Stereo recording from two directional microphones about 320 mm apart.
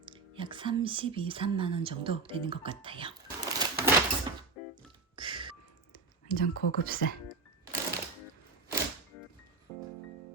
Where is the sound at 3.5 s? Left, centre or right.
Centre.